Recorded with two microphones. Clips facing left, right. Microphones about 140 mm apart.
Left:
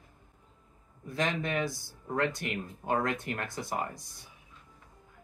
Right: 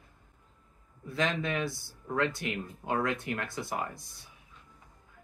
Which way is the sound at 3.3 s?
20° left (ahead or behind).